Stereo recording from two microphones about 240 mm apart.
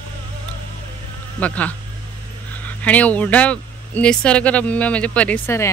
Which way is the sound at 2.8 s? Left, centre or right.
Centre.